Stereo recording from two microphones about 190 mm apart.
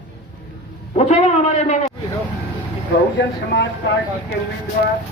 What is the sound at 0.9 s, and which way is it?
Speech, 35° left (ahead or behind).